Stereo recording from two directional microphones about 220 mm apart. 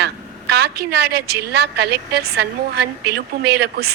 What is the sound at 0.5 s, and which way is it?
A woman's voice, 45° right (ahead or behind).